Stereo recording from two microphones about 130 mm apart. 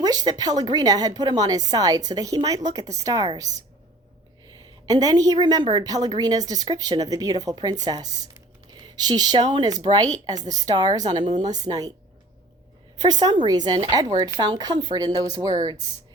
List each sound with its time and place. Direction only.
0.0 s a woman's voice: 30° right (ahead or behind)
4.6 s a woman's voice: 30° right (ahead or behind)
13.0 s speech: 30° right (ahead or behind)